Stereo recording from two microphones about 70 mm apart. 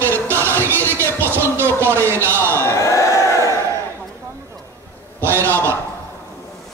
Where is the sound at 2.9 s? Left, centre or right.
Left.